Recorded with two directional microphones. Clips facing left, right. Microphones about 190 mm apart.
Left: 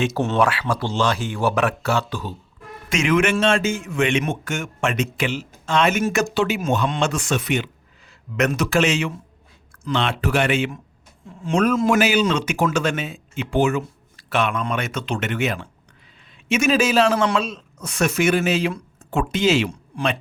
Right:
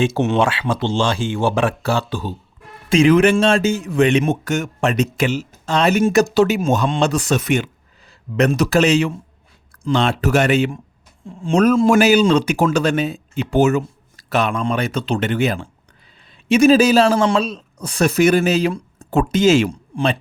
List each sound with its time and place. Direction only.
0.0 s a man's voice: 25° right (ahead or behind); by 7.7 s 45° right (ahead or behind)
8.4 s a man's voice: 35° right (ahead or behind)
19.9 s speech: 25° right (ahead or behind)